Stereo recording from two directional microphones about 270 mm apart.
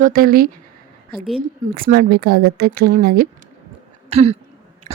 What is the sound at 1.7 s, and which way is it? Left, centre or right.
Speech, right.